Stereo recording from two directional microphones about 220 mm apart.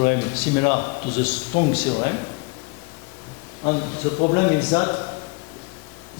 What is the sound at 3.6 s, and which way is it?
Speech, 30° left (ahead or behind).